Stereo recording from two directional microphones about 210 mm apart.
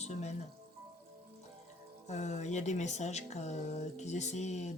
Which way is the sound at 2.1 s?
35° left (ahead or behind).